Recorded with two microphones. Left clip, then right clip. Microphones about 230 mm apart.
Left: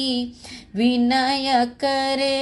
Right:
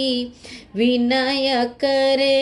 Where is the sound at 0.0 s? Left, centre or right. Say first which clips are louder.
Right 3 dB; left.